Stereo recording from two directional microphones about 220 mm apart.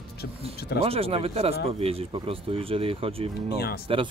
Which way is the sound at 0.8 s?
25° right (ahead or behind).